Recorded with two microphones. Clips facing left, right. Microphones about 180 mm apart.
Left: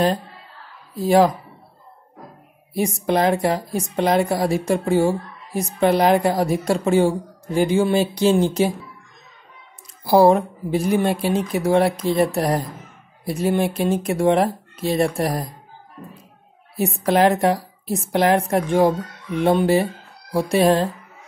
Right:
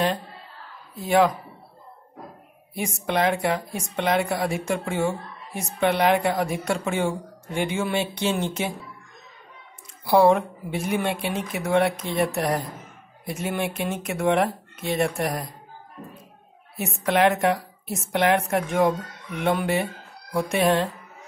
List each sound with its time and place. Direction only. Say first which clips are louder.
0.9 s a woman's voice: left 4 dB; 35° left (ahead or behind)
2.7 s a woman's voice: left 6 dB; 35° left (ahead or behind)
10.0 s a woman's voice: left 3 dB; 35° left (ahead or behind)
16.7 s a woman's voice: left 5 dB; 35° left (ahead or behind)